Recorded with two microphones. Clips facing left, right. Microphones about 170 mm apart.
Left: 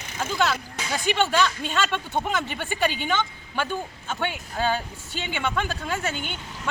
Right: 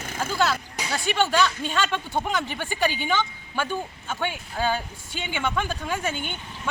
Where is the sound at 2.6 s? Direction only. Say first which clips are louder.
Even; 10° right (ahead or behind).